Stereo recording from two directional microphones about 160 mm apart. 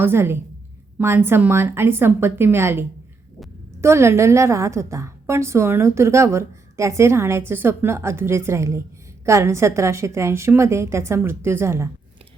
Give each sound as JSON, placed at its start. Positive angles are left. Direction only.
{"t": 0.0, "sound": "a woman's voice", "side_deg": -15}